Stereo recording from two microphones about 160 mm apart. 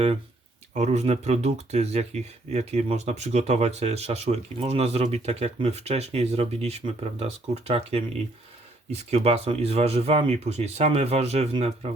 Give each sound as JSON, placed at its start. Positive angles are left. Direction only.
{"t": 0.7, "sound": "speech", "side_deg": -45}